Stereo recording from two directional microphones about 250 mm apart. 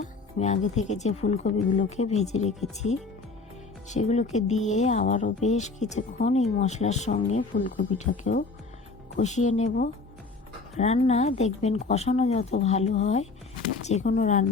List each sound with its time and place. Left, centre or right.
0.0 s speech: left